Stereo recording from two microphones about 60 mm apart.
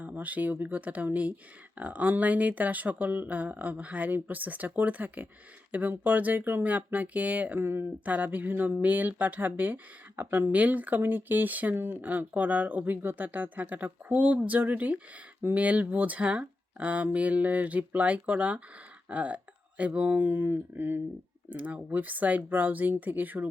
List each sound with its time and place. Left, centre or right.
0.0 s speech: right
7.6 s speech: right
8.0 s speech: right
10.5 s speech: right
21.5 s speech: right